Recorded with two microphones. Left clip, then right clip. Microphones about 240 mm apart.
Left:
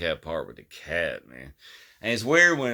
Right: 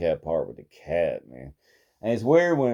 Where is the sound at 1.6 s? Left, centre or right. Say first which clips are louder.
Right 1 dB; centre.